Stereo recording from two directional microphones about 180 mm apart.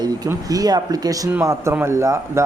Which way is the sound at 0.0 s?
20° right (ahead or behind).